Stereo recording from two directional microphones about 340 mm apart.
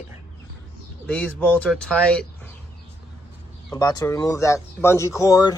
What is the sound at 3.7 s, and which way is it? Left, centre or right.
Speech, centre.